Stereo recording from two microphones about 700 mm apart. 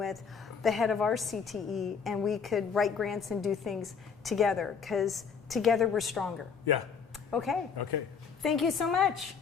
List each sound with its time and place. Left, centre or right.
0.0 s a woman's voice: centre
7.3 s speech: centre
7.8 s speech: left
8.4 s a woman's voice: centre